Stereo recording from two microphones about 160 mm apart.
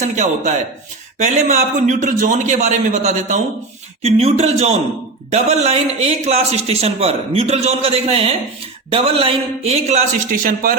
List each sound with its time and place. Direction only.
0.0 s a man's voice: 45° right (ahead or behind)